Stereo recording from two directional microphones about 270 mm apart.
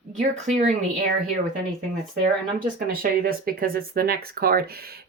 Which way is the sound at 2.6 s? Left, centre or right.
Right.